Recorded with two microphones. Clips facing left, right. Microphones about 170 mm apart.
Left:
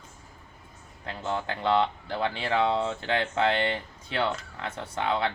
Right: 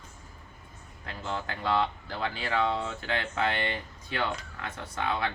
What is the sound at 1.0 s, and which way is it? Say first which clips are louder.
Speech: left 4 dB; 25° left (ahead or behind).